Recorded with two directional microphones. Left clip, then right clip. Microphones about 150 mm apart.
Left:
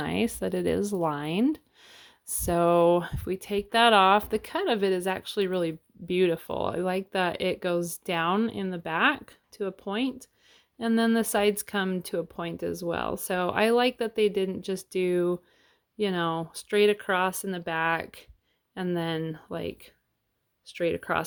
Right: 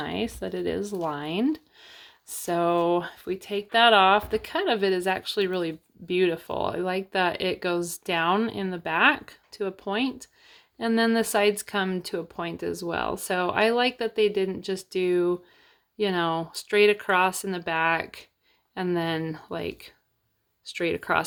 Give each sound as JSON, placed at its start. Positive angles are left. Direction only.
{"t": 0.0, "sound": "speech", "side_deg": 50}